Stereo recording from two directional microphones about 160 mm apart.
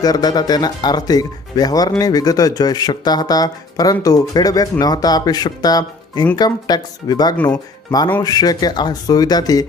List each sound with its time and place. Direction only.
0.0 s speech: 25° left (ahead or behind)